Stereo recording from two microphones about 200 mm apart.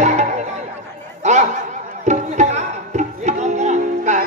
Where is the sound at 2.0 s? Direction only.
35° right (ahead or behind).